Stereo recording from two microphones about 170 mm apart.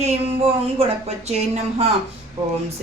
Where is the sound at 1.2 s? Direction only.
35° right (ahead or behind).